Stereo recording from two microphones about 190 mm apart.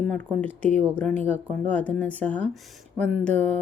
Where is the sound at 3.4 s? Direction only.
35° right (ahead or behind).